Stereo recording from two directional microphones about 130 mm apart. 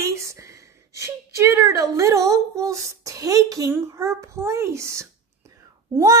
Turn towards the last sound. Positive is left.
turn(degrees=-25)  # may be behind; listen again after turning